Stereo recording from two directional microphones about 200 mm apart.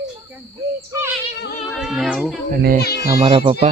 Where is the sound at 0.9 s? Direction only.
15° right (ahead or behind).